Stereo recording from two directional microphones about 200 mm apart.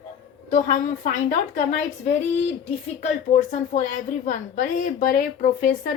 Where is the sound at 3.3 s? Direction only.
40° left (ahead or behind).